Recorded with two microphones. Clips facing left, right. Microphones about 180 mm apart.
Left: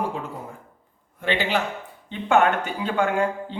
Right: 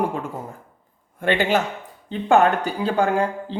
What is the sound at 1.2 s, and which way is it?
Speech, 50° right (ahead or behind).